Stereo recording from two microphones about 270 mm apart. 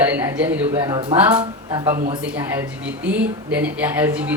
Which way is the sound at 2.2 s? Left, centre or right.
Centre.